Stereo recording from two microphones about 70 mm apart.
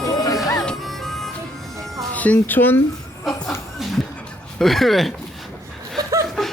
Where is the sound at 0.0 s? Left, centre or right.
Left.